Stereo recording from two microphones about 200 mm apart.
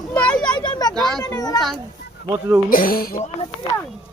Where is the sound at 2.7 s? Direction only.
45° left (ahead or behind).